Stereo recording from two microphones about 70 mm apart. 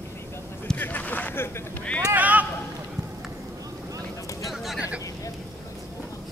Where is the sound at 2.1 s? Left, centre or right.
Right.